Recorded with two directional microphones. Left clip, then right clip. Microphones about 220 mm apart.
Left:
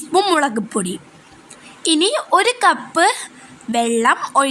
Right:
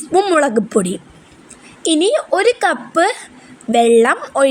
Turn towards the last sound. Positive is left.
turn(degrees=0)  # may be behind; listen again after turning